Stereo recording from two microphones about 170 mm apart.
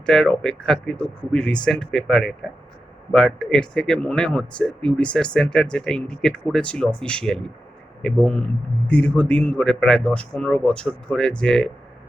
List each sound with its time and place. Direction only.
0.0 s a man's voice: 5° left (ahead or behind)